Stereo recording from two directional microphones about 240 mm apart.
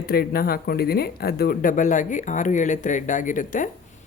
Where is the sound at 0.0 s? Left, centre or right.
Left.